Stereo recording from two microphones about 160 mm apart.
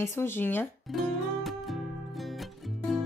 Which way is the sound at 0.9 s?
Centre (ahead or behind).